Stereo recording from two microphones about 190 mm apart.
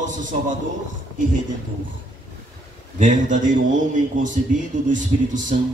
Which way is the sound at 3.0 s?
40° right (ahead or behind).